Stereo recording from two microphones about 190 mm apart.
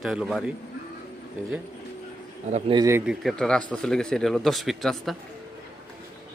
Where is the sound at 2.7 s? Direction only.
15° right (ahead or behind).